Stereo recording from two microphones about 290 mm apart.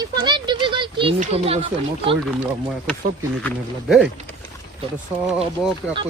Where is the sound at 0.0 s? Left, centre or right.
Centre.